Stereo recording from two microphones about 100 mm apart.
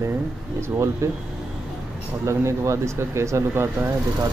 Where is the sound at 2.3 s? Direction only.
30° right (ahead or behind).